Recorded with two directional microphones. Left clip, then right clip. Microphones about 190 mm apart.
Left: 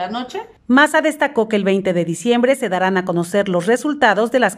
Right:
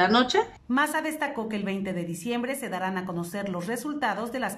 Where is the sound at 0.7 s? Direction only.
50° left (ahead or behind).